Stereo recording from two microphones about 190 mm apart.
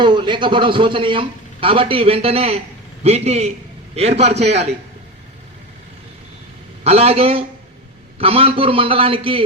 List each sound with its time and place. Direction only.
0.0 s a man's voice: 25° right (ahead or behind)
6.8 s a man's voice: 35° right (ahead or behind)